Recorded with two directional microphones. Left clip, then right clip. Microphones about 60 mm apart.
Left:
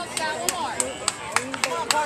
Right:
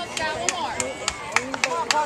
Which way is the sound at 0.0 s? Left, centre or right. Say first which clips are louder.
Right 1 dB; right.